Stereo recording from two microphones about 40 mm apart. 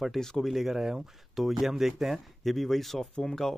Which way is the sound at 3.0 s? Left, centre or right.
Centre.